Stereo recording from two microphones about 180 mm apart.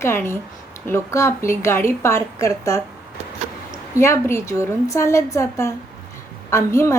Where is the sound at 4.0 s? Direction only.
15° left (ahead or behind).